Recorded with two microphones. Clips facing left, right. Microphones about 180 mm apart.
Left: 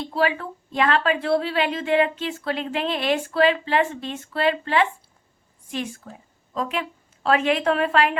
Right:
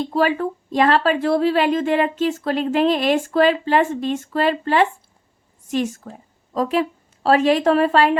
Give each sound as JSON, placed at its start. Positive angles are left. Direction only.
{"t": 0.0, "sound": "a woman's voice", "side_deg": -40}